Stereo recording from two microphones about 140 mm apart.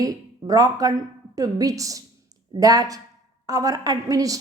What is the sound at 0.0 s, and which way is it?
A woman's voice, 25° right (ahead or behind).